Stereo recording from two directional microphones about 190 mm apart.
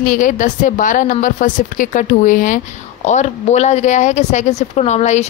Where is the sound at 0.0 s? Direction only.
45° left (ahead or behind).